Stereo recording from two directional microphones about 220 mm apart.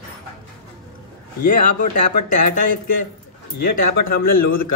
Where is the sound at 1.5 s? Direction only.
35° left (ahead or behind).